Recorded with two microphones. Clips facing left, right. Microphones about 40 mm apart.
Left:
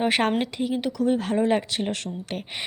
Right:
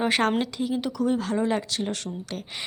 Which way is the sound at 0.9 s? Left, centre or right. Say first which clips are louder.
Left 3 dB; centre.